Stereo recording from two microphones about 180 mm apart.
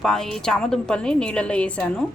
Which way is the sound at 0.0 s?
Centre (ahead or behind).